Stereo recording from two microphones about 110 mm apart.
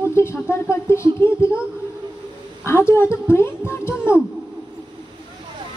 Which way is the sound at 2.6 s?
25° left (ahead or behind).